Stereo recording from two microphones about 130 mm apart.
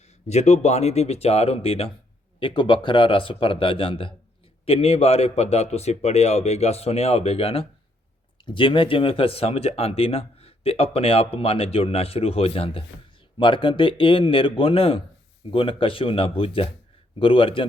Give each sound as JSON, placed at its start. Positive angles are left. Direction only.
{"t": 0.3, "sound": "speech", "side_deg": 60}